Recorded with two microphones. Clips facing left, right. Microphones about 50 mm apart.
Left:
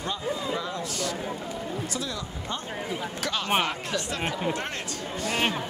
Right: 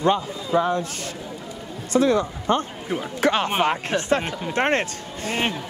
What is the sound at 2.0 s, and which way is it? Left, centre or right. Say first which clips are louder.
Speech: right 14 dB; right.